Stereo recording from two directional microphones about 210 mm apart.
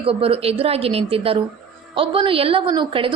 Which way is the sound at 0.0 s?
25° right (ahead or behind).